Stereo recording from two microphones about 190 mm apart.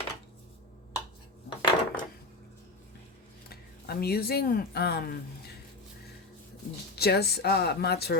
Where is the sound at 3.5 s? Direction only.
55° left (ahead or behind).